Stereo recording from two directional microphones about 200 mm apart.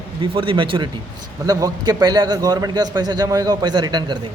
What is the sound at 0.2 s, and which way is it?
A man's voice, 25° right (ahead or behind).